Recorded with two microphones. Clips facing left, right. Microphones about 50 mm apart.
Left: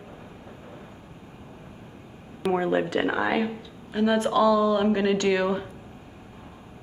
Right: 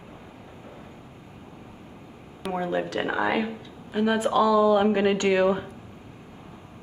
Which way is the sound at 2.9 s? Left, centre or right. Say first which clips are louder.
Left 1 dB; centre.